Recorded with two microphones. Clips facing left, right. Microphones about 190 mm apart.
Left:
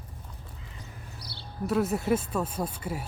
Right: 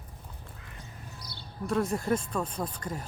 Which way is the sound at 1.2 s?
50° right (ahead or behind).